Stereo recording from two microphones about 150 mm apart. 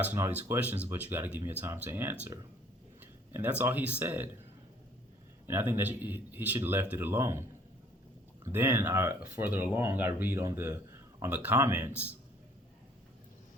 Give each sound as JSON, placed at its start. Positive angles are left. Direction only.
{"t": 0.0, "sound": "speech", "side_deg": -10}
{"t": 5.5, "sound": "speech", "side_deg": -15}
{"t": 8.4, "sound": "speech", "side_deg": -15}